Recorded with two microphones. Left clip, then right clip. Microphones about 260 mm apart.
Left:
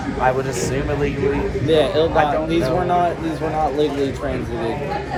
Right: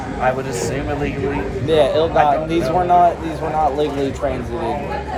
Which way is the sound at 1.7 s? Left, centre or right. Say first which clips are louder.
Right 2 dB; right.